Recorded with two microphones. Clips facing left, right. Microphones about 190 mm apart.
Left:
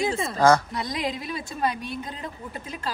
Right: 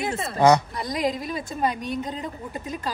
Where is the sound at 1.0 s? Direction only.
45° right (ahead or behind).